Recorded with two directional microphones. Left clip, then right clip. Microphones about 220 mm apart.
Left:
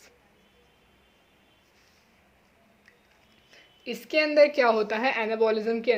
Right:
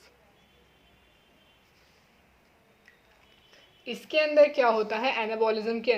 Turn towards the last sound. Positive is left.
turn(degrees=25)  # may be behind; listen again after turning